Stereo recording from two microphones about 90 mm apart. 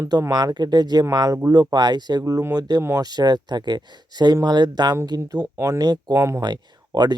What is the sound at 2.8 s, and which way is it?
Speech, 30° right (ahead or behind).